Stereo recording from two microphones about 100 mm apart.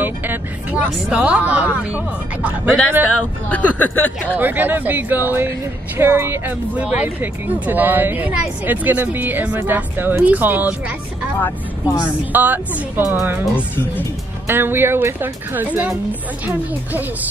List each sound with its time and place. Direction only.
0.0 s speech: 15° right (ahead or behind)
3.4 s speech: 15° left (ahead or behind)
4.4 s speech: 20° right (ahead or behind)
12.3 s speech: 20° right (ahead or behind)